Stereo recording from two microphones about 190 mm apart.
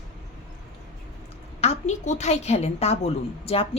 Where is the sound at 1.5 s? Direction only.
35° left (ahead or behind).